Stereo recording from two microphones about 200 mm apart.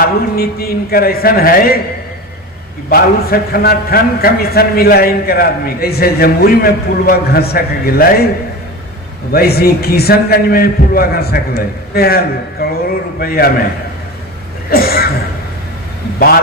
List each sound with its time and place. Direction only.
0.0 s a man's voice: 50° left (ahead or behind)
2.9 s a man's voice: 50° left (ahead or behind)
9.3 s a man's voice: 50° left (ahead or behind)
14.7 s a man's voice: 50° left (ahead or behind)